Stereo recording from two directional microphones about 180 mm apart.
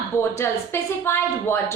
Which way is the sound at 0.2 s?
15° left (ahead or behind).